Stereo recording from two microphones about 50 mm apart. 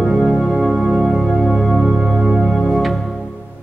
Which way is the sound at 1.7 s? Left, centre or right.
Centre.